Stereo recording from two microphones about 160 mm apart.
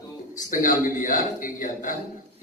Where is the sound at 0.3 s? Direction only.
55° left (ahead or behind).